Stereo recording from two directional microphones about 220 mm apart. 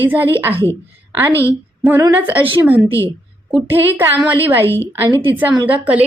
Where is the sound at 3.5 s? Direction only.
10° right (ahead or behind).